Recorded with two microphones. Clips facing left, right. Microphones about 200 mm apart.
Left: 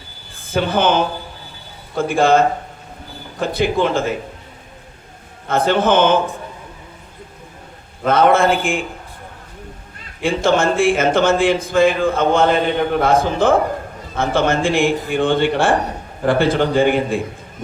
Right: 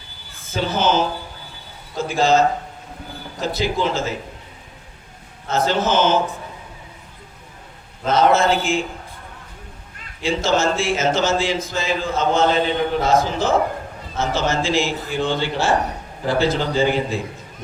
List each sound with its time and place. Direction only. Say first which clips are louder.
0.5 s speech: left 3 dB; 55° left (ahead or behind)
3.4 s speech: left 4 dB; 55° left (ahead or behind)
5.5 s speech: left 4 dB; 55° left (ahead or behind)
8.0 s speech: left 3 dB; 55° left (ahead or behind)
10.2 s speech: left 3 dB; 55° left (ahead or behind)